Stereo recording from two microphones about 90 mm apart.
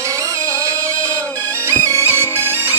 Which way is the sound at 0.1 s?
35° right (ahead or behind).